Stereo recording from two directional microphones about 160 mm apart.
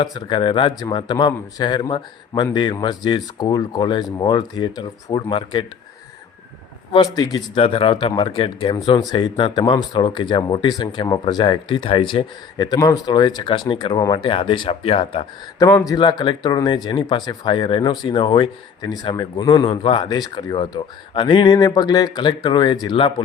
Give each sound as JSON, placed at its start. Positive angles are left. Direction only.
{"t": 0.0, "sound": "speech", "side_deg": 30}
{"t": 6.9, "sound": "speech", "side_deg": 25}
{"t": 15.5, "sound": "speech", "side_deg": 20}